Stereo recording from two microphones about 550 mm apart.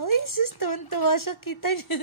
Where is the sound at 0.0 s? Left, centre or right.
Left.